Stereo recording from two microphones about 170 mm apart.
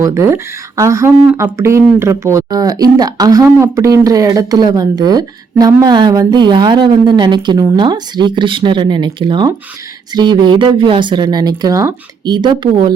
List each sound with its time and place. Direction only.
0.0 s speech: 15° right (ahead or behind)